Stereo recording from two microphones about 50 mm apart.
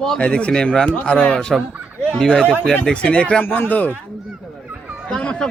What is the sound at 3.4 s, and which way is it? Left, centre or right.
Speech, left.